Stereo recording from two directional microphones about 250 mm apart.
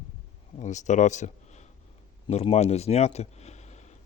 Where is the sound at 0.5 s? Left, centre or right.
Left.